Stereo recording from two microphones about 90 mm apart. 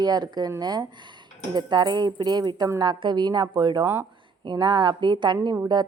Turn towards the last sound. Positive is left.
turn(degrees=-55)  # may be behind; listen again after turning